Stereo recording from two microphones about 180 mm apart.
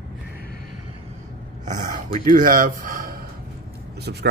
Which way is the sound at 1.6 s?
45° right (ahead or behind).